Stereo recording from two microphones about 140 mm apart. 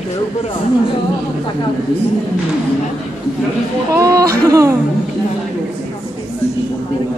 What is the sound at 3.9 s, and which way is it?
Speech, 25° right (ahead or behind).